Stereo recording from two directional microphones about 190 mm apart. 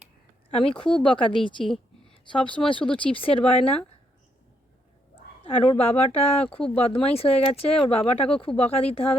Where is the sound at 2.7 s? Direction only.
25° left (ahead or behind).